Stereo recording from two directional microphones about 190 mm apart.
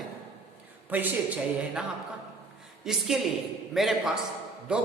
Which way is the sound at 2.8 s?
Centre (ahead or behind).